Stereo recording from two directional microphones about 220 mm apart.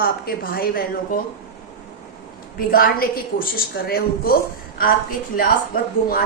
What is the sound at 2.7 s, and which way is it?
A woman's voice, 40° left (ahead or behind).